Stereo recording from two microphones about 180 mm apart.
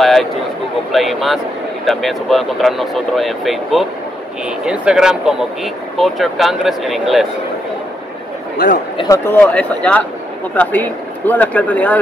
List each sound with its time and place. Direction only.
0.0 s speech: centre (ahead or behind)
8.9 s speech: 20° left (ahead or behind)
9.4 s speech: 5° left (ahead or behind)